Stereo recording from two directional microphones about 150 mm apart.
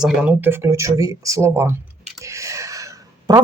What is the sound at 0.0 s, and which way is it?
Speech, 10° right (ahead or behind).